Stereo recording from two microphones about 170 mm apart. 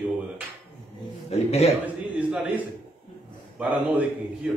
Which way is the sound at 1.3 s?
40° left (ahead or behind).